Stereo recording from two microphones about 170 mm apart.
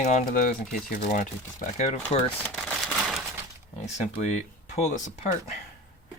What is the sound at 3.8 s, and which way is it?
Speech, 40° left (ahead or behind).